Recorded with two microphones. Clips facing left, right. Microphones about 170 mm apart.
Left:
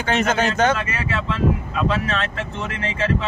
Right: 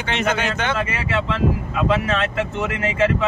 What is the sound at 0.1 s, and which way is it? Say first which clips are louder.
Speech: left 2 dB; 40° left (ahead or behind).